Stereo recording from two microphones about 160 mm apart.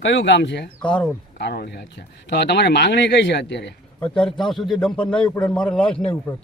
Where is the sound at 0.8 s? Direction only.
5° left (ahead or behind).